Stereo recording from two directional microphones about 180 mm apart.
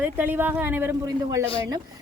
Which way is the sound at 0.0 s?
10° right (ahead or behind).